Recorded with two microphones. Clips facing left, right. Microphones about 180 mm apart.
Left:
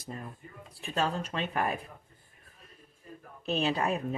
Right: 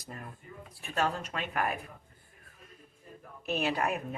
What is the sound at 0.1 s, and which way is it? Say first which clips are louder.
Speech: even; 25° left (ahead or behind).